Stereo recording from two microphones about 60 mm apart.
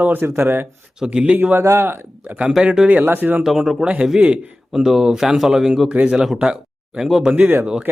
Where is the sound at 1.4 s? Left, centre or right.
Right.